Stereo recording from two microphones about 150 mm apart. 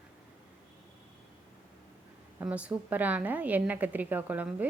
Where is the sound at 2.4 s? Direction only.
10° right (ahead or behind).